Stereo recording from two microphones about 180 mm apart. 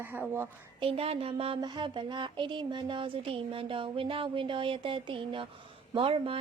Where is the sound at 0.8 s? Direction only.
30° right (ahead or behind).